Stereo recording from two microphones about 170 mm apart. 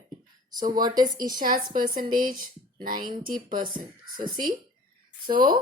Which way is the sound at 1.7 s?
55° right (ahead or behind).